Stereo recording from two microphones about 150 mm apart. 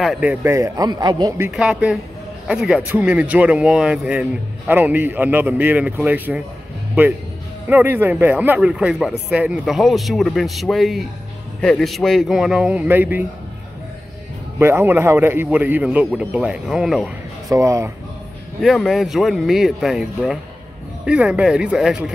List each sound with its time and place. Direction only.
0.0 s a man's voice: 5° right (ahead or behind); by 1.3 s 30° right (ahead or behind)
1.5 s speech: 5° right (ahead or behind)
7.6 s speech: 10° right (ahead or behind)
14.6 s speech: 15° right (ahead or behind)
17.5 s a man's voice: 20° right (ahead or behind)
18.6 s speech: centre (ahead or behind)